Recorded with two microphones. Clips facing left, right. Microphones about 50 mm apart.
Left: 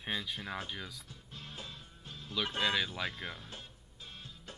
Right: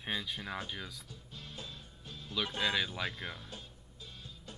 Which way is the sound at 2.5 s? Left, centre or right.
Centre.